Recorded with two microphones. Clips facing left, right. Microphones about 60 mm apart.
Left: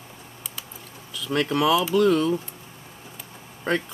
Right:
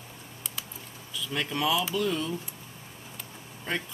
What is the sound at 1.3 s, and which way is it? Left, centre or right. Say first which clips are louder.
Speech: left 7 dB; left.